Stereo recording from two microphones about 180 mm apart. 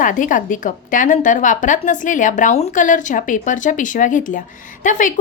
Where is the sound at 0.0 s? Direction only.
45° left (ahead or behind).